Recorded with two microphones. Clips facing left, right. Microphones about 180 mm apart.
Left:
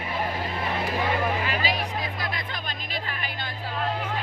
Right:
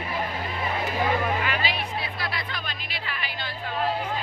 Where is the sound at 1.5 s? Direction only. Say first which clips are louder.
Left 1 dB; 40° left (ahead or behind).